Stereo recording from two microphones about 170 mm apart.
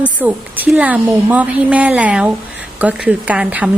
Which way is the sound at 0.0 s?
10° right (ahead or behind).